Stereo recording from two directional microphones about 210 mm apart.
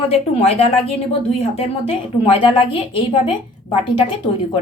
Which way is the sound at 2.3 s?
25° left (ahead or behind).